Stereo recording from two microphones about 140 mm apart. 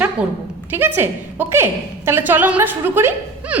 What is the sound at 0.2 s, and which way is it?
A woman's voice, 10° right (ahead or behind).